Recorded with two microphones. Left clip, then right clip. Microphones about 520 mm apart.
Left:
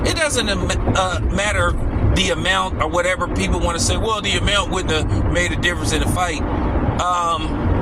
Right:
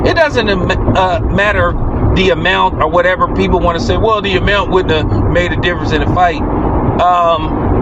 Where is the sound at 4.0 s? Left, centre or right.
Left.